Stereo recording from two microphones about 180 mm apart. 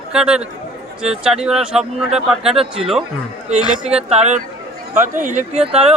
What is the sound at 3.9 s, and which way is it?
Speech, 35° right (ahead or behind).